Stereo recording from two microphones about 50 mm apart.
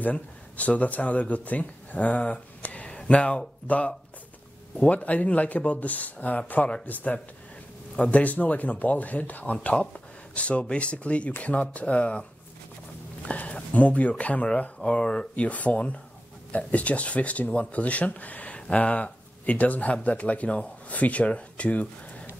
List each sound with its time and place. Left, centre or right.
0.0 s speech: left
13.3 s a sound: left
13.7 s speech: left